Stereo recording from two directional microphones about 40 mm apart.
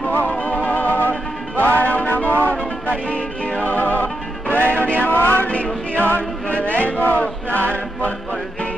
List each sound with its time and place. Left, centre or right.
0.3 s music: left
3.1 s music: left
3.6 s music: left
5.5 s music: left